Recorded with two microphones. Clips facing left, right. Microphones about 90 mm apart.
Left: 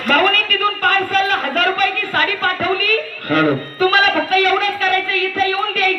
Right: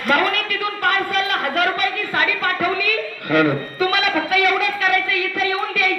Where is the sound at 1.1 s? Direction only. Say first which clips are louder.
Left 3 dB; 45° left (ahead or behind).